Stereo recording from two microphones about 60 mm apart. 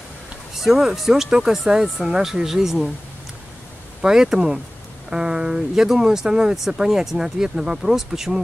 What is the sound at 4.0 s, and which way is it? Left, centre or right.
Speech, centre.